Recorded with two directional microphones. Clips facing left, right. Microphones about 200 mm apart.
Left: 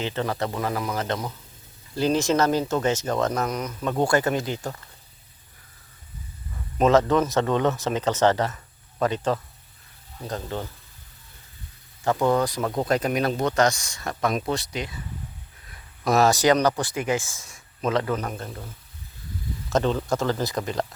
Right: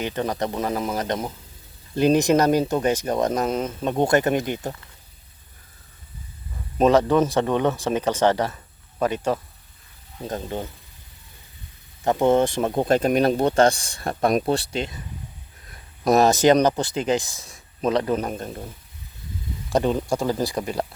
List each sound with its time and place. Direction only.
0.0 s speech: 15° right (ahead or behind)
6.8 s speech: 15° right (ahead or behind)
12.0 s speech: 25° right (ahead or behind)
16.1 s speech: 20° right (ahead or behind)
17.3 s speech: 35° right (ahead or behind)
17.8 s speech: 20° right (ahead or behind)
19.7 s speech: 15° right (ahead or behind)